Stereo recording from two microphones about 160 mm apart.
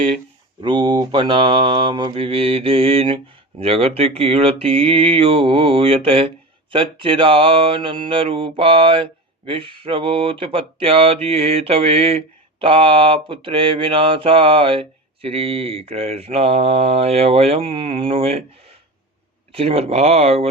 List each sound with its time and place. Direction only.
0.6 s speech: 25° right (ahead or behind)
19.5 s speech: 40° right (ahead or behind)